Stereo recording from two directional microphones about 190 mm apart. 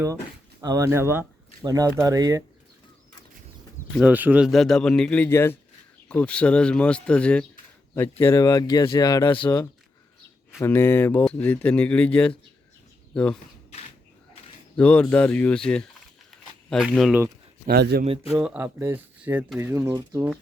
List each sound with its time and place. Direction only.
0.6 s speech: 15° right (ahead or behind)
3.9 s speech: 10° right (ahead or behind); by 9.6 s 25° left (ahead or behind)
10.6 s speech: 10° left (ahead or behind)
14.8 s speech: 5° left (ahead or behind)
17.7 s a man's voice: 55° right (ahead or behind)
18.3 s speech: 5° right (ahead or behind)